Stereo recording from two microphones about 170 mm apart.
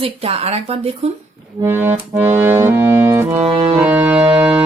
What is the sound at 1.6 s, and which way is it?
Accordion, 15° right (ahead or behind).